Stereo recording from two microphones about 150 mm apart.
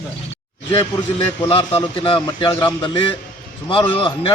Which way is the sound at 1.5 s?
40° left (ahead or behind).